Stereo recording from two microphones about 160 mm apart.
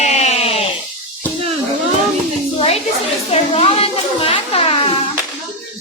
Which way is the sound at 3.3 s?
40° left (ahead or behind).